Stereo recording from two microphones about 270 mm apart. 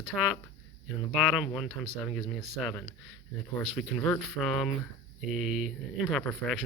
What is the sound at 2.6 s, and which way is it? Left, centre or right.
Speech, centre.